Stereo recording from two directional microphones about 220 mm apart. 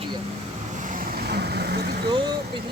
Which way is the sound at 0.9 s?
40° right (ahead or behind).